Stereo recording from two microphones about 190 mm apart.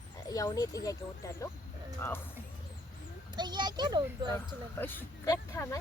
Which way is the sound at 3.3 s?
25° right (ahead or behind).